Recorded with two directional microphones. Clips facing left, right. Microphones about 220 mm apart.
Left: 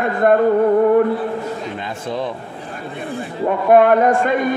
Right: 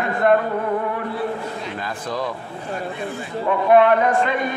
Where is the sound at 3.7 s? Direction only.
45° left (ahead or behind).